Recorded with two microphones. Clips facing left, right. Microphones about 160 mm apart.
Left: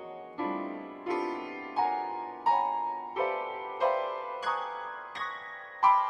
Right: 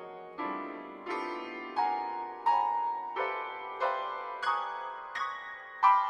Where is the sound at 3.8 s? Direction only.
15° left (ahead or behind).